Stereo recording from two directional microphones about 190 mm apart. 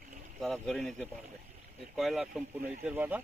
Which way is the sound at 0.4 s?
Centre (ahead or behind).